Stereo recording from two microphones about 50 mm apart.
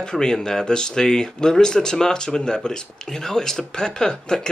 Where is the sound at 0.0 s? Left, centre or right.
Centre.